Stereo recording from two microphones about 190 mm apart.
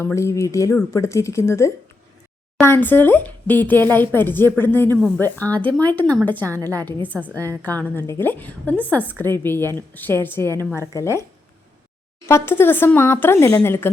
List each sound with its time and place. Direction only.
0.0 s a woman's voice: 15° left (ahead or behind)
6.4 s a woman's voice: 15° right (ahead or behind)
7.6 s a woman's voice: 10° left (ahead or behind)
12.2 s a woman's voice: 15° left (ahead or behind)